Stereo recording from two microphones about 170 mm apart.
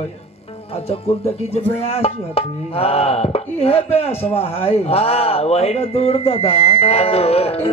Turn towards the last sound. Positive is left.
turn(degrees=35)  # may be behind; listen again after turning